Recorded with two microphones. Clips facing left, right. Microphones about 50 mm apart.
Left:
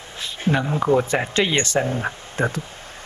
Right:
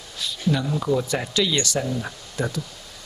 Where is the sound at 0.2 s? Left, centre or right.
Left.